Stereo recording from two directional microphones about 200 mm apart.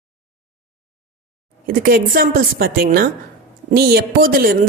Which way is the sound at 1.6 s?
45° right (ahead or behind).